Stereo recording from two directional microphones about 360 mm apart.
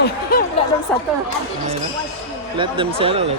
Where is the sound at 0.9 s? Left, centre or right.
Centre.